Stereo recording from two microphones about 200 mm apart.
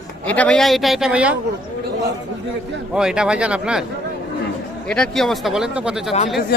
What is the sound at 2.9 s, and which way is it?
Speech, 5° right (ahead or behind).